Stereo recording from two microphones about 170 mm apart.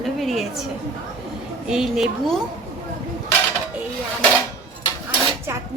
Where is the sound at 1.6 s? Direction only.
5° right (ahead or behind).